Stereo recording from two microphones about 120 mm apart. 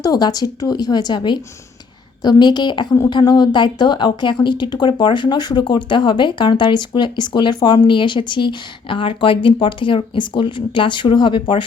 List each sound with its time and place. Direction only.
0.0 s speech: 30° left (ahead or behind)